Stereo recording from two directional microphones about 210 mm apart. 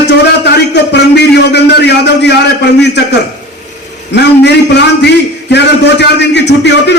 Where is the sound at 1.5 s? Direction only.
55° left (ahead or behind).